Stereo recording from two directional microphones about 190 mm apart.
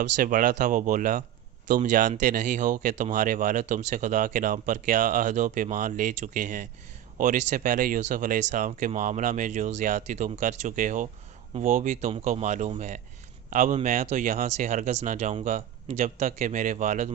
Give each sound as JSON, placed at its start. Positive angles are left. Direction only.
{"t": 0.0, "sound": "speech", "side_deg": -45}